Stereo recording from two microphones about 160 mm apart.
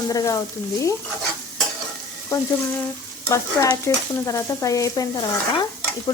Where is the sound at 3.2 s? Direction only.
20° left (ahead or behind).